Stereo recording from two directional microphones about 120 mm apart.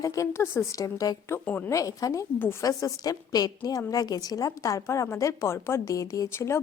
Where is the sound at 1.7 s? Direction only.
30° left (ahead or behind).